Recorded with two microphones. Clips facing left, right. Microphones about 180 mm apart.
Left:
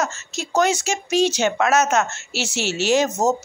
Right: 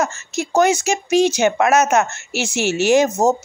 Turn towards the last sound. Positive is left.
turn(degrees=-10)  # may be behind; listen again after turning